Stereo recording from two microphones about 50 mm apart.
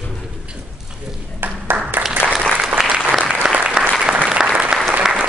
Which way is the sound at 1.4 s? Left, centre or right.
Right.